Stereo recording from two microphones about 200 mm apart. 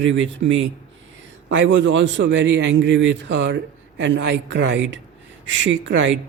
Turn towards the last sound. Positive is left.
turn(degrees=-70)  # may be behind; listen again after turning